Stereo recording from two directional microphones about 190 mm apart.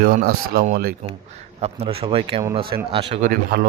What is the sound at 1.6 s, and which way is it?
A man's voice, 30° right (ahead or behind).